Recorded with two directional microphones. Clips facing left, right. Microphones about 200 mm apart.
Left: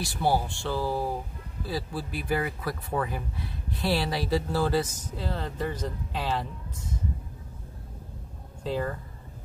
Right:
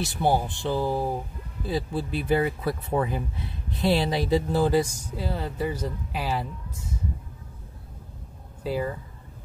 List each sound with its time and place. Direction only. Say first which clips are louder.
0.0 s speech: right 2 dB; 20° right (ahead or behind)
8.6 s speech: right 2 dB; 10° right (ahead or behind)